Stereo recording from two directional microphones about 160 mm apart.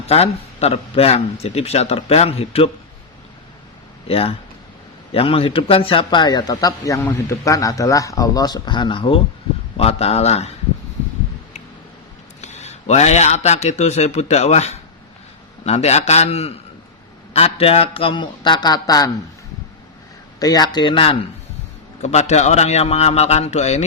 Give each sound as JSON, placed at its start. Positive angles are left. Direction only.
{"t": 0.1, "sound": "speech", "side_deg": 40}
{"t": 4.1, "sound": "a man's voice", "side_deg": 35}
{"t": 12.4, "sound": "a man's voice", "side_deg": 45}
{"t": 20.4, "sound": "a man's voice", "side_deg": 25}
{"t": 22.0, "sound": "a man's voice", "side_deg": 45}